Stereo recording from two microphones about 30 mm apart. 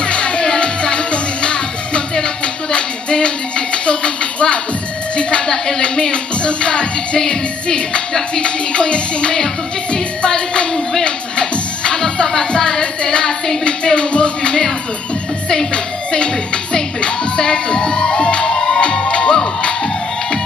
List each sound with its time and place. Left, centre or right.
0.0 s music: left
11.1 s speech: left
15.5 s speech: left
16.7 s music: left